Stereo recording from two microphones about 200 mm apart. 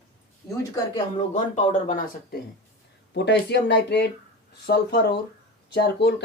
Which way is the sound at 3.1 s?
60° left (ahead or behind).